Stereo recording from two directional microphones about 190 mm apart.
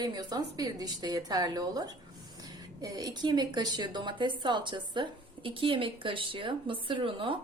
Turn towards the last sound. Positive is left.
turn(degrees=-25)  # may be behind; listen again after turning